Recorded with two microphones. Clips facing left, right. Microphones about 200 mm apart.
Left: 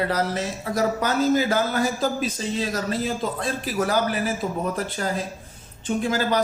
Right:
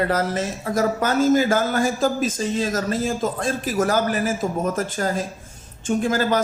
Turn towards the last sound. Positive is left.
turn(degrees=-50)  # may be behind; listen again after turning